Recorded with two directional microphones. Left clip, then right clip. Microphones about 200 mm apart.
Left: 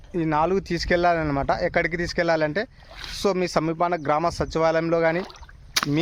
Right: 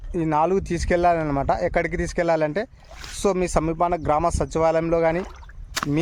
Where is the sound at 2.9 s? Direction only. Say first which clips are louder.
Left 2 dB; 20° left (ahead or behind).